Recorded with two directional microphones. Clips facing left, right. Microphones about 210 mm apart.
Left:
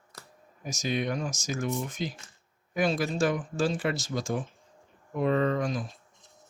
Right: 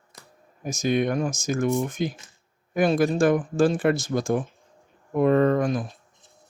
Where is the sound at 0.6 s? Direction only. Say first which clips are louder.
Right 7 dB; 55° right (ahead or behind).